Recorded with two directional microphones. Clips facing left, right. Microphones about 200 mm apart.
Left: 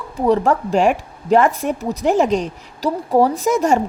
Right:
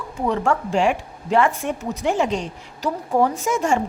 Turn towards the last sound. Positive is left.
turn(degrees=40)  # may be behind; listen again after turning